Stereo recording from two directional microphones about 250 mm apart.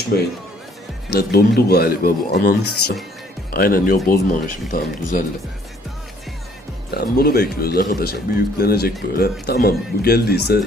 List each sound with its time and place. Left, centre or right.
0.1 s speech: left
6.9 s speech: left